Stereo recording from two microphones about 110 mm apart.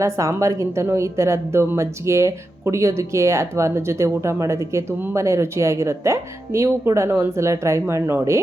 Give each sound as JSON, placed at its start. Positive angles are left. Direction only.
{"t": 0.0, "sound": "a woman's voice", "side_deg": -30}